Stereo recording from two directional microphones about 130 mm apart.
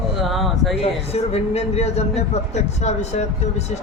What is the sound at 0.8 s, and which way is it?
Speech, 55° left (ahead or behind).